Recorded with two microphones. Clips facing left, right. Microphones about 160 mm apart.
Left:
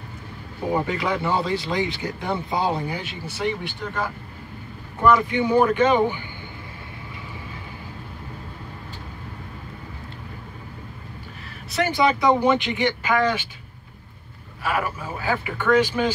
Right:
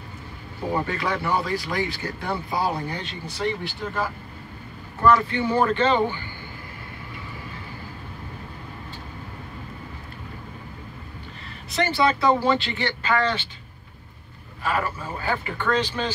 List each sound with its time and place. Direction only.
0.7 s speech: 15° left (ahead or behind)
2.9 s speech: 5° left (ahead or behind)
5.0 s speech: 15° left (ahead or behind)
11.4 s a sound: 5° left (ahead or behind)
11.9 s speech: 15° left (ahead or behind)
14.6 s speech: 10° left (ahead or behind)